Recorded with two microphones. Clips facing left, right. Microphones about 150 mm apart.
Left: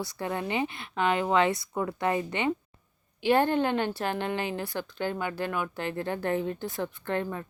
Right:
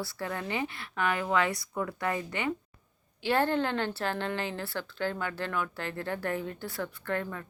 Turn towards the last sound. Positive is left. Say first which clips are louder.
# left 3 dB
turn(degrees=20)  # may be behind; listen again after turning